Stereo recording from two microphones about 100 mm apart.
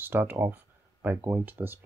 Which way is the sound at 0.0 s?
20° right (ahead or behind).